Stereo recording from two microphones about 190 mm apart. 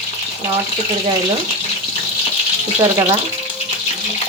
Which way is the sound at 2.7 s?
20° right (ahead or behind).